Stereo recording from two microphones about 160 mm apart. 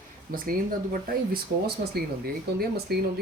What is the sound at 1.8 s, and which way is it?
Speech, 75° right (ahead or behind).